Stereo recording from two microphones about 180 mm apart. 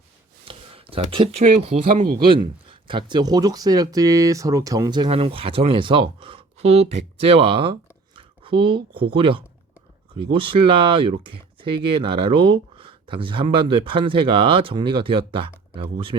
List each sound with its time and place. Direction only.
0.4 s speech: 30° right (ahead or behind)
2.2 s speech: 30° right (ahead or behind)